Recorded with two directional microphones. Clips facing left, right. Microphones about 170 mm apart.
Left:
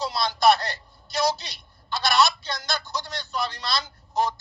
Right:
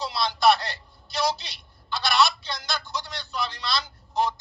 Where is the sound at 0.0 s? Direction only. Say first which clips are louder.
Left 1 dB; 45° left (ahead or behind).